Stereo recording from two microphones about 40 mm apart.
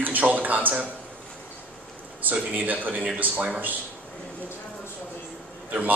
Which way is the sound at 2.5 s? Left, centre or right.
Right.